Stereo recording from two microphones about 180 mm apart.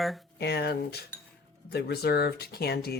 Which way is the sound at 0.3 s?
65° left (ahead or behind).